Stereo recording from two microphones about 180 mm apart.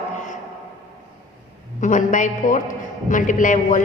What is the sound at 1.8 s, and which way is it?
A woman's voice, 45° left (ahead or behind).